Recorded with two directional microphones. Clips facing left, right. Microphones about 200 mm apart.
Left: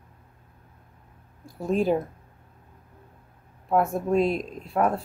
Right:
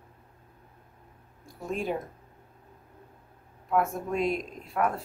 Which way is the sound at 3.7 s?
35° left (ahead or behind).